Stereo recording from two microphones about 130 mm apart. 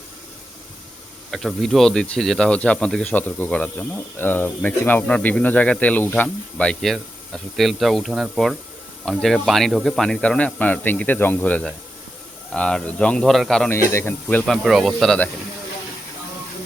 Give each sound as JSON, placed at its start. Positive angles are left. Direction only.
{"t": 1.3, "sound": "speech", "side_deg": 0}
{"t": 13.7, "sound": "speech", "side_deg": 20}
{"t": 14.4, "sound": "speech", "side_deg": 0}